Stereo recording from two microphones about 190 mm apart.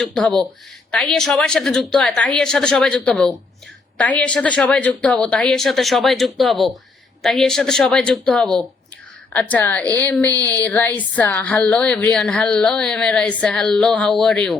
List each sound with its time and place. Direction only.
0.0 s a woman's voice: 5° left (ahead or behind)